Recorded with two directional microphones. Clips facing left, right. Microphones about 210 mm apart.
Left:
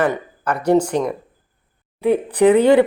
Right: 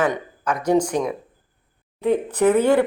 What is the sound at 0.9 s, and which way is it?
Speech, 10° right (ahead or behind).